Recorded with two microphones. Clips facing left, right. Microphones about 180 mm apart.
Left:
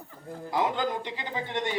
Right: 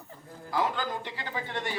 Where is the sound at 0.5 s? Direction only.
20° left (ahead or behind).